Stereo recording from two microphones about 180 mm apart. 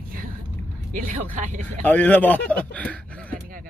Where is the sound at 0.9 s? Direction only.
45° right (ahead or behind).